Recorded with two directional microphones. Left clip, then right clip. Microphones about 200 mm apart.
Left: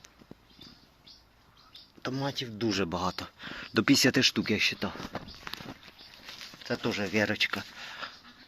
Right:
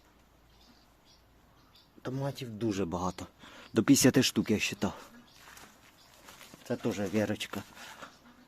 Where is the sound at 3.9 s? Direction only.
25° right (ahead or behind).